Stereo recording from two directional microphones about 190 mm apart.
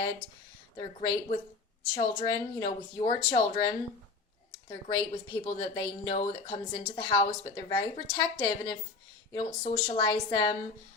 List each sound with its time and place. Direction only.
0.8 s speech: 25° left (ahead or behind)
4.7 s speech: 20° left (ahead or behind)